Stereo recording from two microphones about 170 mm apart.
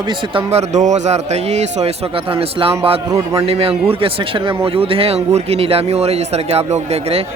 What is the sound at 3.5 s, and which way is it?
A man's voice, 35° right (ahead or behind).